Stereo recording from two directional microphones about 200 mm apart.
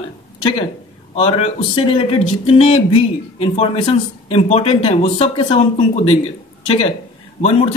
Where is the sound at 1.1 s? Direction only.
30° left (ahead or behind).